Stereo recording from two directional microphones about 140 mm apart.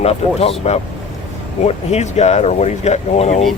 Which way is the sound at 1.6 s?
50° left (ahead or behind).